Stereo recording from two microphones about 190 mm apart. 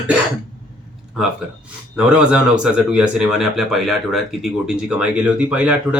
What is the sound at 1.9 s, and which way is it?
Speech, 5° right (ahead or behind).